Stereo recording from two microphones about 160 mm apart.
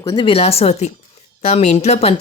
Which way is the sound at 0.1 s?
35° left (ahead or behind).